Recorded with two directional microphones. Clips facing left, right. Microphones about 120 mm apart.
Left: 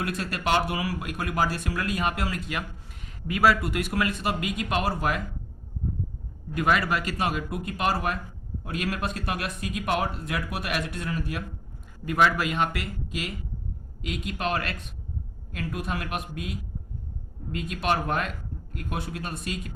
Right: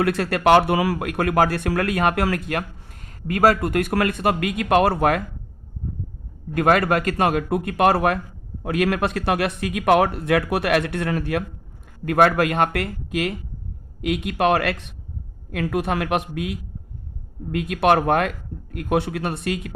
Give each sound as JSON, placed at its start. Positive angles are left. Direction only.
{"t": 0.0, "sound": "speech", "side_deg": -65}
{"t": 6.5, "sound": "speech", "side_deg": -55}
{"t": 12.0, "sound": "speech", "side_deg": -55}